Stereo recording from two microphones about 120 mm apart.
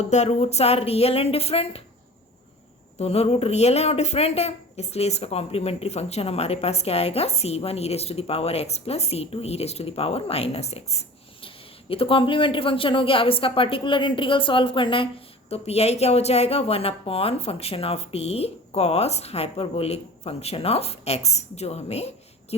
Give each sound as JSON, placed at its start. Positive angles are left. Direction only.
{"t": 0.0, "sound": "a man's voice", "side_deg": 70}
{"t": 3.0, "sound": "a man's voice", "side_deg": 60}
{"t": 11.4, "sound": "a man's voice", "side_deg": 50}